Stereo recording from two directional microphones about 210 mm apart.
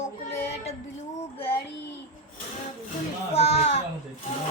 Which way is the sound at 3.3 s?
30° left (ahead or behind).